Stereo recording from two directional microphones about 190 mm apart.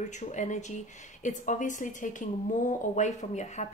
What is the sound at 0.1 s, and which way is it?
Speech, 40° left (ahead or behind).